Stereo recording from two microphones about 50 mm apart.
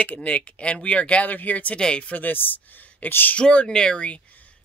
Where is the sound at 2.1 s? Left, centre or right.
Left.